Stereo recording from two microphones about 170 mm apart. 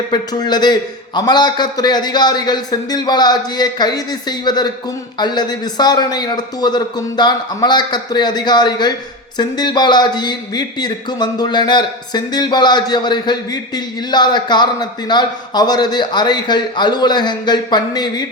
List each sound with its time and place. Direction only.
0.1 s speech: 25° left (ahead or behind)